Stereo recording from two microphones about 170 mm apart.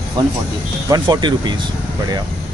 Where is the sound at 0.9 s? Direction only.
25° right (ahead or behind).